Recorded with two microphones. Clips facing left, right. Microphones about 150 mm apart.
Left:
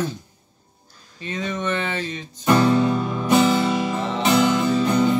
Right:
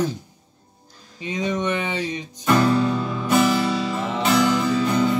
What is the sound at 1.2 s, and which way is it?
Speech, 15° right (ahead or behind).